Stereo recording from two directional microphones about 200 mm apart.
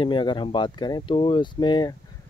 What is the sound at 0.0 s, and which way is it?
Speech, 25° left (ahead or behind).